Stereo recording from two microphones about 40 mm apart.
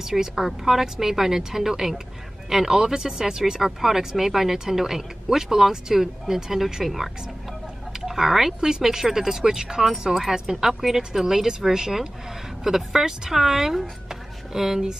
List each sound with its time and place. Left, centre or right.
0.0 s speech: centre
8.5 s speech: centre